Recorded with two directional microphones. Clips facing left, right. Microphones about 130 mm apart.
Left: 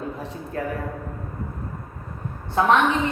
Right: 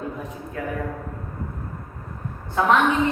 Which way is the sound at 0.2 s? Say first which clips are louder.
Left 2 dB; 30° left (ahead or behind).